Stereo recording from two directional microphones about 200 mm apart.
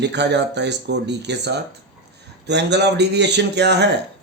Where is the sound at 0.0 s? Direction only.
60° right (ahead or behind).